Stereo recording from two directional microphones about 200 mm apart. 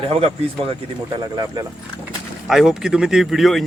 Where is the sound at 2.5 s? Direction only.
Centre (ahead or behind).